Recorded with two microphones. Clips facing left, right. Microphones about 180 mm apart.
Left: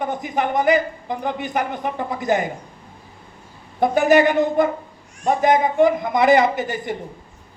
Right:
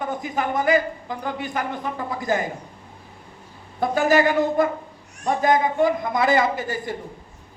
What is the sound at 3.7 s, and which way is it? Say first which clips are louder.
Speech: left 4 dB; 20° left (ahead or behind).